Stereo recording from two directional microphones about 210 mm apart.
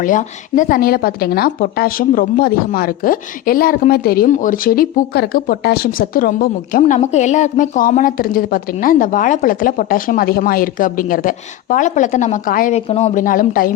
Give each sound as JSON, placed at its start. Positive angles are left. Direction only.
{"t": 0.0, "sound": "speech", "side_deg": 40}
{"t": 12.9, "sound": "speech", "side_deg": 30}